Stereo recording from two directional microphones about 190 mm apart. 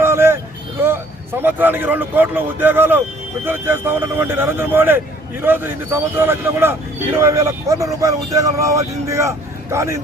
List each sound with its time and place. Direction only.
0.0 s vehicle: 15° right (ahead or behind)
0.8 s speech: 10° right (ahead or behind)